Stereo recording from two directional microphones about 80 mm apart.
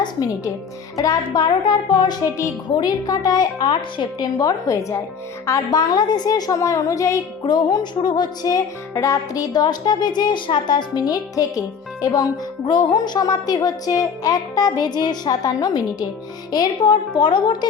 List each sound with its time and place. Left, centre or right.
0.9 s music: left
4.4 s a woman's voice: left
5.7 s speech: left
7.4 s music: left
12.0 s speech: left
12.6 s speech: left
13.1 s speech: left
16.5 s music: left
17.2 s speech: left